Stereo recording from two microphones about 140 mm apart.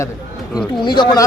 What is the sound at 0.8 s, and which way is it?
Speech, 30° left (ahead or behind).